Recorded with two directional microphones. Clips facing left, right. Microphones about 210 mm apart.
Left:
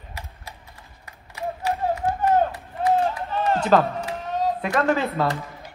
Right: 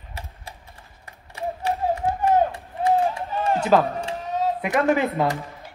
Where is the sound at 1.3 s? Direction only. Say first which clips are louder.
Even; 30° right (ahead or behind).